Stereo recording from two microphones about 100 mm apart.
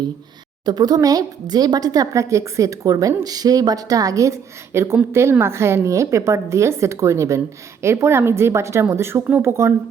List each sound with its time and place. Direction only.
0.6 s a woman's voice: 40° right (ahead or behind); by 9.7 s 25° right (ahead or behind)